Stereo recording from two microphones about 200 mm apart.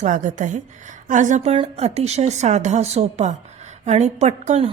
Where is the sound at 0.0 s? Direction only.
40° right (ahead or behind).